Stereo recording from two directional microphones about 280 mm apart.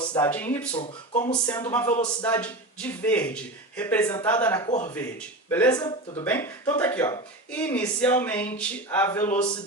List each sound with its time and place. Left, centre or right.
0.1 s speech: centre
0.7 s speech: centre
1.5 s speech: centre
4.7 s speech: left
5.5 s speech: centre